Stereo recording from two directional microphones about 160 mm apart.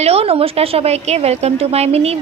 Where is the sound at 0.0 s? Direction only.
40° right (ahead or behind).